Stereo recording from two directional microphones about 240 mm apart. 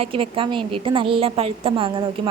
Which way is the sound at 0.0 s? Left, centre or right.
Right.